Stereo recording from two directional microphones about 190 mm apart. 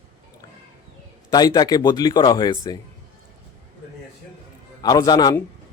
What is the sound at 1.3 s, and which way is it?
A man's voice, 20° left (ahead or behind).